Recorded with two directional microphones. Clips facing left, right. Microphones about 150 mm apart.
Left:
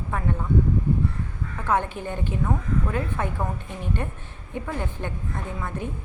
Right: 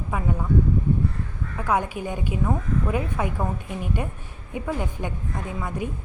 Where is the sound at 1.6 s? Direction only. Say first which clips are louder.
Even; 10° right (ahead or behind).